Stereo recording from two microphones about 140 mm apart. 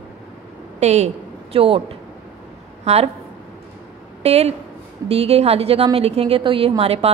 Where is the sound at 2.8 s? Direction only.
50° right (ahead or behind).